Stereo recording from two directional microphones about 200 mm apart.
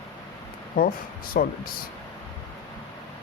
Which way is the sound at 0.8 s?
45° left (ahead or behind).